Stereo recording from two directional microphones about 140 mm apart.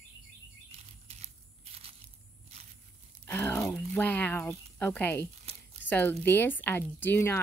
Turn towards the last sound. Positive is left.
turn(degrees=15)  # may be behind; listen again after turning